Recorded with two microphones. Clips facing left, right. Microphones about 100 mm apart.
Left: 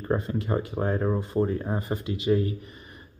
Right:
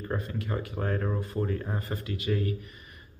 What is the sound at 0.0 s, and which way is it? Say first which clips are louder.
Speech: left 6 dB; 25° left (ahead or behind).